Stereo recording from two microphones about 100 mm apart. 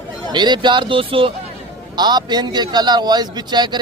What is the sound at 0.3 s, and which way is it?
A man's voice, 50° right (ahead or behind).